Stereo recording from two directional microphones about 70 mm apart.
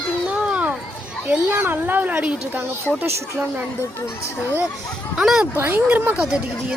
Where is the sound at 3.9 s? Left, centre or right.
Left.